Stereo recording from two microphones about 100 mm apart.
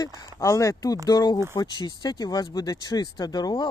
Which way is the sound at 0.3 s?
30° left (ahead or behind).